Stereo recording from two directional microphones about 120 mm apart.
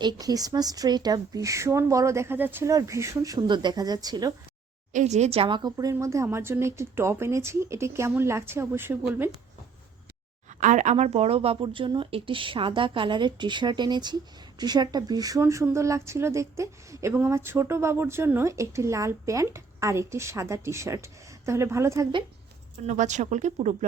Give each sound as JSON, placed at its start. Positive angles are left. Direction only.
{"t": 0.0, "sound": "speech", "side_deg": -35}
{"t": 4.9, "sound": "speech", "side_deg": -80}
{"t": 5.7, "sound": "speech", "side_deg": -25}
{"t": 10.6, "sound": "speech", "side_deg": -85}
{"t": 22.9, "sound": "speech", "side_deg": -90}